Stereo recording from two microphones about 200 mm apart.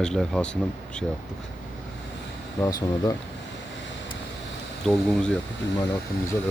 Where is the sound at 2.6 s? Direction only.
15° left (ahead or behind).